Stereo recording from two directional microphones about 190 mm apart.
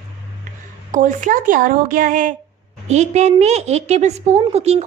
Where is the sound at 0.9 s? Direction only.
40° right (ahead or behind).